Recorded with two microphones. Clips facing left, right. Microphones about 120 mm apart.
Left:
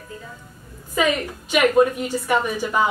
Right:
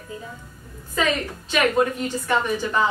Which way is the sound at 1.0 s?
10° left (ahead or behind).